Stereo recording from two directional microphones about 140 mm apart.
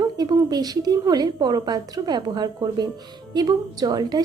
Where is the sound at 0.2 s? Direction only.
25° right (ahead or behind).